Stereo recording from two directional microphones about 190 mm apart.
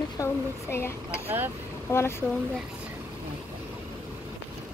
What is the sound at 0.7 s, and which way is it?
Speech, 15° left (ahead or behind).